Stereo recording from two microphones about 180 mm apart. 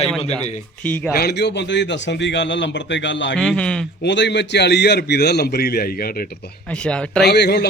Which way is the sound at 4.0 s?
75° left (ahead or behind).